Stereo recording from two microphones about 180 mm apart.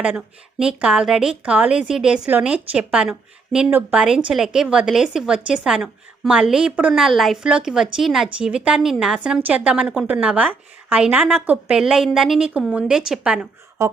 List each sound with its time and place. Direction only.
0.0 s a woman's voice: 5° right (ahead or behind)